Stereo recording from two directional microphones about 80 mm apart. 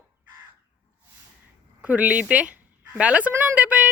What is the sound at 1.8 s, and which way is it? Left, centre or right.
Speech, centre.